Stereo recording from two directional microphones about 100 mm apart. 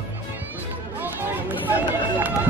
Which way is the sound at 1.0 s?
20° right (ahead or behind).